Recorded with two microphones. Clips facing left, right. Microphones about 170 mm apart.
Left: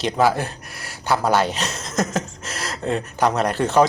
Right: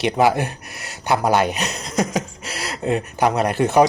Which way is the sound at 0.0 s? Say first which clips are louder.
Right 2 dB; 15° right (ahead or behind).